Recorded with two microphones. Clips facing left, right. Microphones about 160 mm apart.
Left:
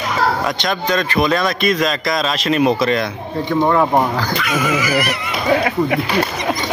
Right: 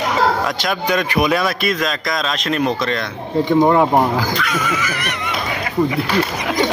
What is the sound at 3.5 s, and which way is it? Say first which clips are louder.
Speech: right 2 dB; 20° right (ahead or behind).